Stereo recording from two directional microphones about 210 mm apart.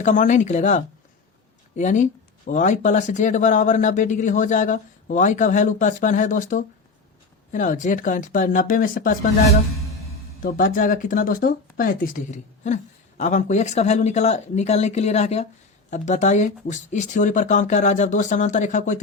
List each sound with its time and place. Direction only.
0.0 s speech: 35° left (ahead or behind)
10.4 s speech: 40° left (ahead or behind)